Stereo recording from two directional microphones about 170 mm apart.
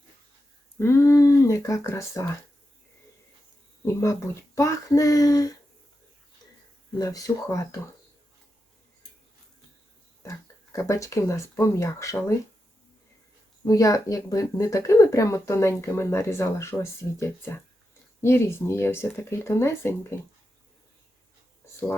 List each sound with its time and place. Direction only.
0.8 s speech: 15° left (ahead or behind)
3.8 s speech: 15° left (ahead or behind)
7.0 s speech: 20° left (ahead or behind)
10.2 s speech: 20° left (ahead or behind)
13.7 s speech: 20° left (ahead or behind)